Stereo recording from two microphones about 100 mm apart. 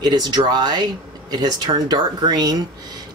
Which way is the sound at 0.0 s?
45° right (ahead or behind).